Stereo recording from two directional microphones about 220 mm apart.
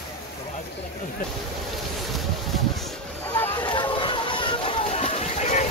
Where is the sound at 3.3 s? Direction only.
15° left (ahead or behind); by 5.6 s 30° left (ahead or behind).